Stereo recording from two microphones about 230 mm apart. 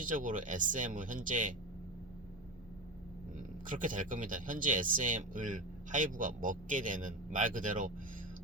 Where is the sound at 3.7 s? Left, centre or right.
Right.